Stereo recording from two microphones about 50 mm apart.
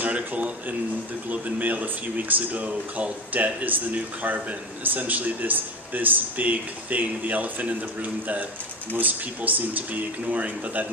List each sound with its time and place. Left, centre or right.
0.0 s speech: right